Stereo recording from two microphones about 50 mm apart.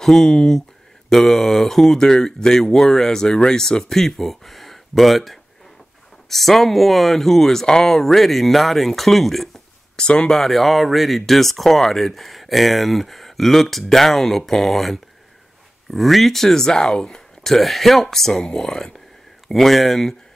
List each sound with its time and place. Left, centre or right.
0.0 s speech: centre
9.9 s speech: centre
10.3 s speech: centre
17.5 s speech: centre